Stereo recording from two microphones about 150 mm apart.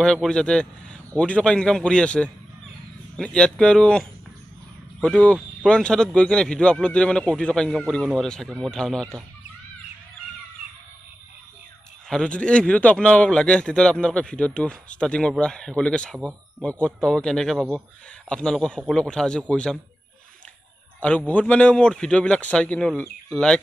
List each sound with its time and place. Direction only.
0.0 s speech: 5° left (ahead or behind)
12.1 s speech: 5° left (ahead or behind)
16.2 s speech: 10° right (ahead or behind)
16.6 s speech: 10° left (ahead or behind)
21.3 s speech: 10° left (ahead or behind)